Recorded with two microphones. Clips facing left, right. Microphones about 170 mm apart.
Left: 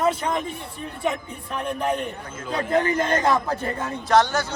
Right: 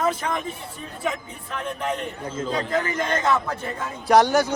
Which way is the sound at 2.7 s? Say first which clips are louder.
Left 6 dB; 30° left (ahead or behind).